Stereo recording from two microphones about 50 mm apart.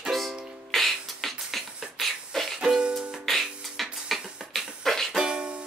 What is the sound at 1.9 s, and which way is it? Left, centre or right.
Beatboxing, centre.